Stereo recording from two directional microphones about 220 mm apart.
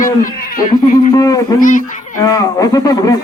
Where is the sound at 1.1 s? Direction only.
15° left (ahead or behind).